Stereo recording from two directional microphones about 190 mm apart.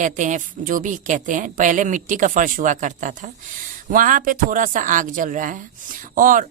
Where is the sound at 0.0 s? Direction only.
40° right (ahead or behind).